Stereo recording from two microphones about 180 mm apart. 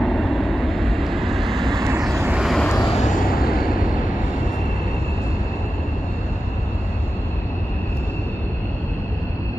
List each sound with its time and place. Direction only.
0.0 s vehicle: centre (ahead or behind)
1.8 s vehicle: 15° right (ahead or behind); by 2.9 s 5° left (ahead or behind)
3.2 s a sound: 55° left (ahead or behind)